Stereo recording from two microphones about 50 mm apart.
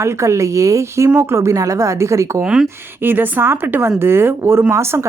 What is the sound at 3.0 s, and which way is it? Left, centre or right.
A woman's voice, right.